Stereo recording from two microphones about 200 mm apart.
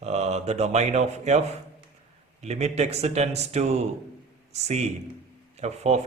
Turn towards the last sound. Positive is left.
turn(degrees=-35)  # may be behind; listen again after turning